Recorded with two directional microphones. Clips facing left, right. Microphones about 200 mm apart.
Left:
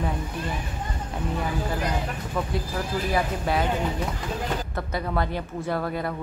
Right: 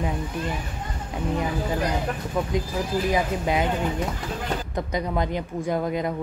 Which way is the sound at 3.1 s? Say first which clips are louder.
Even; 15° right (ahead or behind).